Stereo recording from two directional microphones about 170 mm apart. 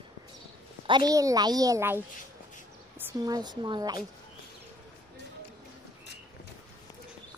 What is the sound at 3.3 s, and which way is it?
Speech, 25° right (ahead or behind).